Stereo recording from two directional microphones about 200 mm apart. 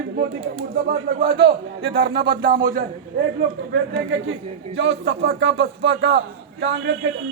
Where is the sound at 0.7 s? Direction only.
55° right (ahead or behind).